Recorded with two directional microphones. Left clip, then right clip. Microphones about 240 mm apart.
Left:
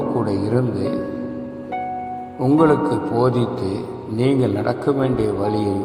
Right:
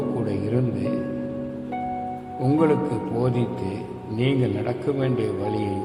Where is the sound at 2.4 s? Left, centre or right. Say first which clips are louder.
Left 5 dB; centre.